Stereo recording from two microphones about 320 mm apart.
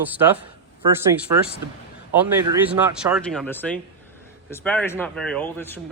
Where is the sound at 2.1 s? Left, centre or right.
Centre.